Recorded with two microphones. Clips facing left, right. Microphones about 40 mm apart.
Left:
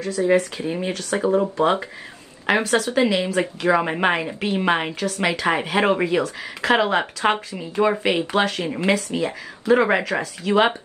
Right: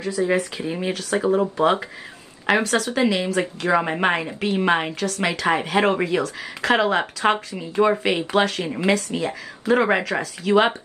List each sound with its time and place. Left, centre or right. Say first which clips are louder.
0.2 s speech: left 2 dB; centre
0.7 s speech: even; centre